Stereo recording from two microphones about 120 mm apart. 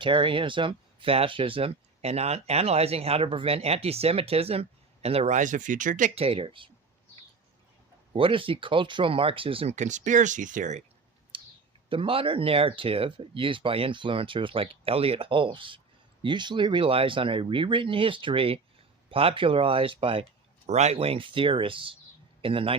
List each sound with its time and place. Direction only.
0.0 s speech: 45° right (ahead or behind); by 6.1 s 90° right
6.1 s speech: 50° right (ahead or behind)
8.1 s speech: 45° right (ahead or behind)
9.7 s speech: 90° right
11.3 s clicking: 45° right (ahead or behind)
11.9 s speech: 50° right (ahead or behind)
20.7 s a man's voice: 70° right (ahead or behind); by 22.7 s 50° right (ahead or behind)